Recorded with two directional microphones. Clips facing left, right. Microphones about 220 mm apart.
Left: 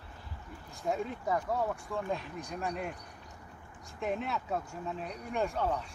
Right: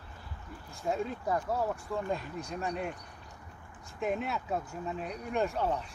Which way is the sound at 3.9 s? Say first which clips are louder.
Right 2 dB; 5° right (ahead or behind).